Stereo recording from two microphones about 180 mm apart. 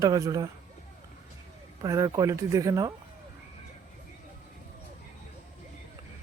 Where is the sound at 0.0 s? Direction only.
20° right (ahead or behind).